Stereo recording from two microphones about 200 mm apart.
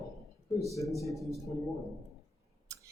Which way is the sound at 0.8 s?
Centre (ahead or behind).